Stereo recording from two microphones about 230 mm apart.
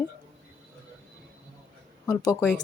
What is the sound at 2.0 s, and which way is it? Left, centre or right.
Speech, centre.